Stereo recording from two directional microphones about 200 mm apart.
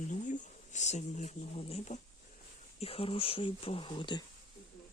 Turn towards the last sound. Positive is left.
turn(degrees=25)  # may be behind; listen again after turning